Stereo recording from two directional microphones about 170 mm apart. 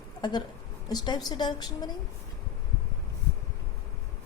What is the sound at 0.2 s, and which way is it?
A woman's voice, 25° left (ahead or behind).